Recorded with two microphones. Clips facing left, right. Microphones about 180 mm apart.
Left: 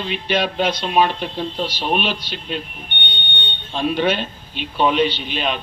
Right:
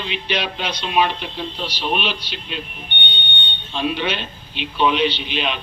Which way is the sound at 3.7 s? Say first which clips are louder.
Left 4 dB; 45° left (ahead or behind).